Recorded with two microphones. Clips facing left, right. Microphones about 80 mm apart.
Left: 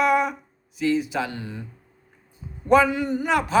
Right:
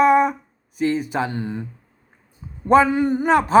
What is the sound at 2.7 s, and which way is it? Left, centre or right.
Speech, right.